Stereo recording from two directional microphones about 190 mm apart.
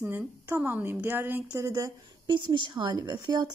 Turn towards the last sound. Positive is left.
turn(degrees=-20)  # may be behind; listen again after turning